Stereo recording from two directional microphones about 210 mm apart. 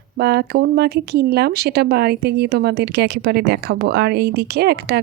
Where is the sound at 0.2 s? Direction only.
50° right (ahead or behind).